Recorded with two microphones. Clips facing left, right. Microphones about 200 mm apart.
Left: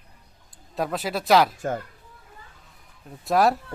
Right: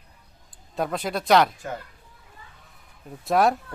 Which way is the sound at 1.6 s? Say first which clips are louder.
Left 6 dB; 45° left (ahead or behind).